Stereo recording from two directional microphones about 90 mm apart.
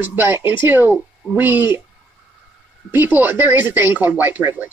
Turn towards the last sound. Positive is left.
turn(degrees=-20)  # may be behind; listen again after turning